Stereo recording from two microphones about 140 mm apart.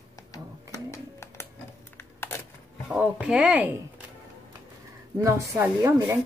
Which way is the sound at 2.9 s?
10° right (ahead or behind).